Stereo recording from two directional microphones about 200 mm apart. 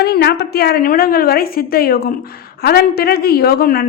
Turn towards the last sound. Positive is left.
turn(degrees=50)  # may be behind; listen again after turning